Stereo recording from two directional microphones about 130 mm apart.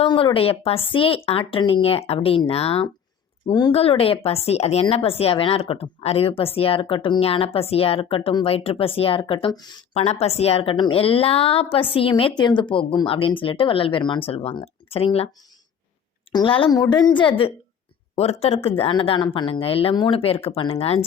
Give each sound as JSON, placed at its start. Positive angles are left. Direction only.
{"t": 0.0, "sound": "speech", "side_deg": 40}
{"t": 3.4, "sound": "a woman's voice", "side_deg": 35}
{"t": 3.7, "sound": "speech", "side_deg": 50}
{"t": 9.9, "sound": "speech", "side_deg": 55}
{"t": 16.3, "sound": "a woman's voice", "side_deg": 40}
{"t": 18.2, "sound": "speech", "side_deg": 50}